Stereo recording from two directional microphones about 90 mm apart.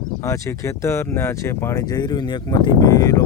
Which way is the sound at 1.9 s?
50° left (ahead or behind).